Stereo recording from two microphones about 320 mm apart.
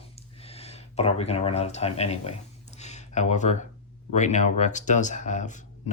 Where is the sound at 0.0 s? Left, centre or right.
Centre.